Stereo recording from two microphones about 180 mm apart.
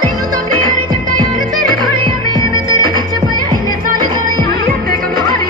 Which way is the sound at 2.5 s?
20° left (ahead or behind).